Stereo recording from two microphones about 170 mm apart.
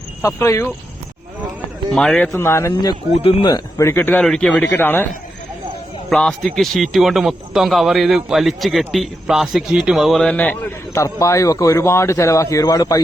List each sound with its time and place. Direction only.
0.2 s speech: 15° left (ahead or behind)
1.9 s speech: 5° left (ahead or behind)
2.3 s speech: 15° left (ahead or behind)
2.9 s speech: 35° left (ahead or behind); by 4.9 s 5° left (ahead or behind)
6.1 s speech: 5° left (ahead or behind); by 13.0 s 20° left (ahead or behind)